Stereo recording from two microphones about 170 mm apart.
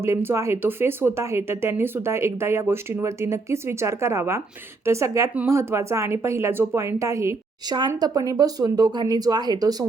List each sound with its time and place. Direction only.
0.0 s speech: 15° right (ahead or behind)